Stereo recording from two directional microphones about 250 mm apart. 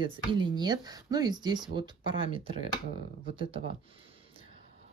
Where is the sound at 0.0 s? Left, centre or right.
Centre.